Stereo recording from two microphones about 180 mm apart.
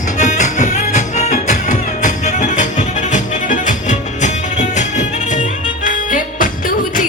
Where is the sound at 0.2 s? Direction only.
40° left (ahead or behind).